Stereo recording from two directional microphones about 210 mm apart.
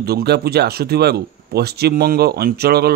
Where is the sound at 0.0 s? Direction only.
50° right (ahead or behind).